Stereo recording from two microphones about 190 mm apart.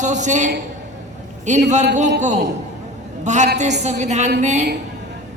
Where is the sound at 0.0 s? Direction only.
40° right (ahead or behind).